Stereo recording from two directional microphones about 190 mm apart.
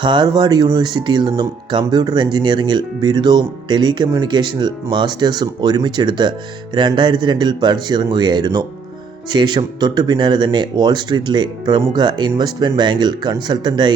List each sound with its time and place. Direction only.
0.0 s speech: 25° right (ahead or behind)